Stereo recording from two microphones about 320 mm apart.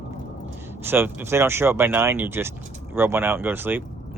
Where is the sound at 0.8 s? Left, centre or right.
Centre.